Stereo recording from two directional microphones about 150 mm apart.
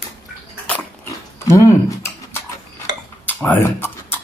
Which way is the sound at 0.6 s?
10° left (ahead or behind).